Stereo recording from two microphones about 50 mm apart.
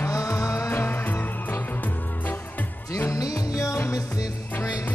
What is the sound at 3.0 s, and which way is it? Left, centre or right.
Music, left.